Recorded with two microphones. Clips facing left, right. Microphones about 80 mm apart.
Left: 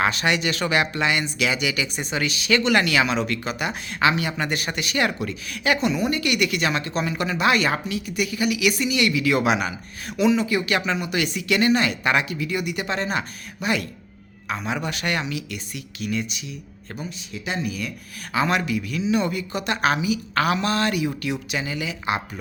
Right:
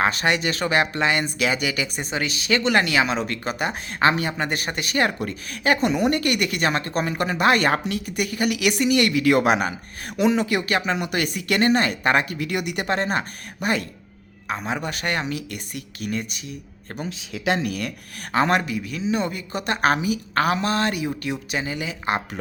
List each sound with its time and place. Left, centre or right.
0.0 s speech: right
10.7 s speech: right
10.9 s speech: right
11.2 s speech: right
12.4 s speech: right
17.0 s speech: right
18.3 s speech: right
18.6 s speech: right